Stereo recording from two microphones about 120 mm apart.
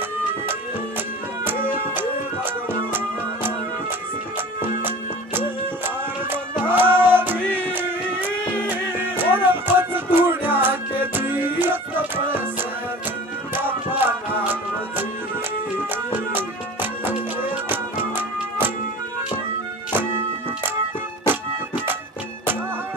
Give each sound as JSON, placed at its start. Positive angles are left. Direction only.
{"t": 1.4, "sound": "music", "side_deg": -15}
{"t": 4.8, "sound": "music", "side_deg": -15}
{"t": 16.1, "sound": "music", "side_deg": -15}
{"t": 21.3, "sound": "music", "side_deg": -15}